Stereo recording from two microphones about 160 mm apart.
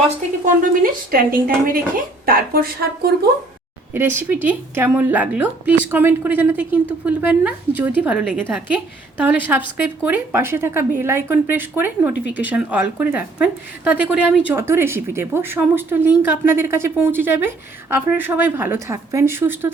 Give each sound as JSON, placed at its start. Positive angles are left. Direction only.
{"t": 0.8, "sound": "speech", "side_deg": -60}
{"t": 3.9, "sound": "speech", "side_deg": -15}